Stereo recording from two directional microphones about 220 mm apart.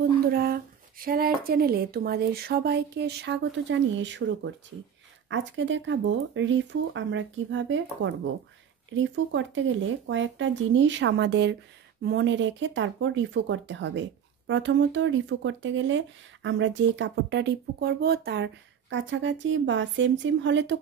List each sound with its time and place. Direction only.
0.3 s speech: 45° right (ahead or behind)